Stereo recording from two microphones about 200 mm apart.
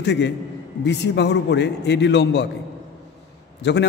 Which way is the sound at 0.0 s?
60° left (ahead or behind).